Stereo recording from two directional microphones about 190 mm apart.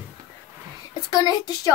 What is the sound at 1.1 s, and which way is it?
Speech, 20° left (ahead or behind).